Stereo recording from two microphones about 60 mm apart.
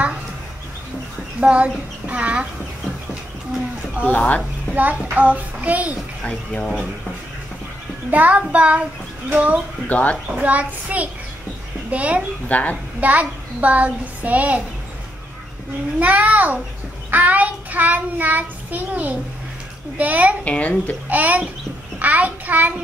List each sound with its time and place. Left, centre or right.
1.4 s child singing: right
4.0 s speech: left
4.7 s child singing: right
6.2 s speech: left
8.1 s child singing: right
9.8 s speech: left
10.4 s child singing: right
12.4 s speech: left
13.0 s child singing: right
16.0 s child singing: right
20.4 s speech: left
21.1 s child singing: right